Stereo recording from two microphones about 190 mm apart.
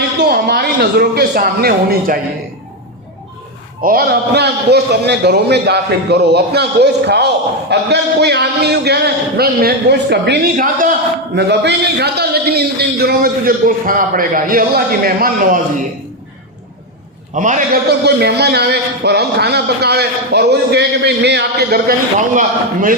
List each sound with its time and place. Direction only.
0.2 s a man's voice: 55° right (ahead or behind)
3.8 s a man's voice: 55° right (ahead or behind)
11.3 s a man's voice: 60° right (ahead or behind)
17.3 s a man's voice: 40° right (ahead or behind)
17.8 s a man's voice: 60° right (ahead or behind)
22.4 s a man's voice: 45° right (ahead or behind)